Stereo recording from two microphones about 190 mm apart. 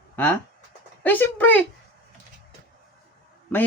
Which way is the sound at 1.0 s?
10° left (ahead or behind).